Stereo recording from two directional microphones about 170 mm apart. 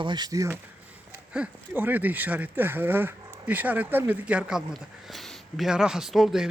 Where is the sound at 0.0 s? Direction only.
25° right (ahead or behind).